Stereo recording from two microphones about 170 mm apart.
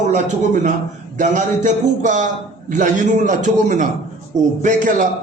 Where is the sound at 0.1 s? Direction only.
45° right (ahead or behind).